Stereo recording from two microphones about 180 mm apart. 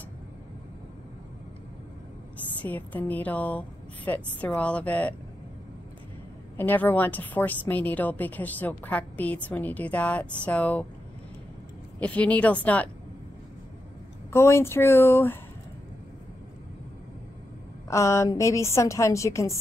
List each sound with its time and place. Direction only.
2.6 s a woman's voice: 10° left (ahead or behind)
6.5 s a woman's voice: 10° left (ahead or behind)
12.0 s a woman's voice: 10° left (ahead or behind)
14.3 s a woman's voice: 15° left (ahead or behind)
17.8 s a woman's voice: 15° left (ahead or behind)